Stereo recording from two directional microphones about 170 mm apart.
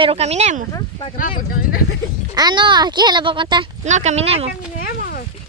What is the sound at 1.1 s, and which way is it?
Speech, 55° left (ahead or behind).